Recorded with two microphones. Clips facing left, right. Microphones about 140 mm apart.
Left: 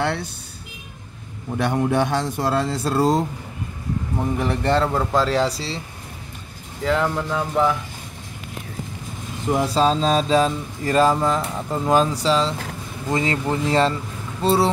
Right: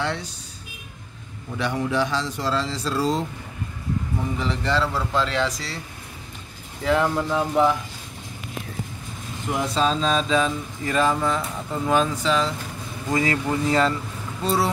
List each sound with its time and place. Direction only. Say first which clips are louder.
0.0 s a sound: left 4 dB; 55° left (ahead or behind)
1.6 s speech: left 4 dB; 55° left (ahead or behind)
4.4 s speech: left 4 dB; 55° left (ahead or behind); by 5.8 s 30° left (ahead or behind)
6.8 s speech: even; 5° right (ahead or behind)
9.5 s speech: left 4 dB; 35° left (ahead or behind)